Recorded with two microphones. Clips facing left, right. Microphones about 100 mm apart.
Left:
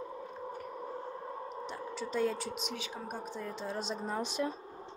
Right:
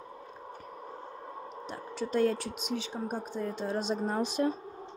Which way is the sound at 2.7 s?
30° right (ahead or behind).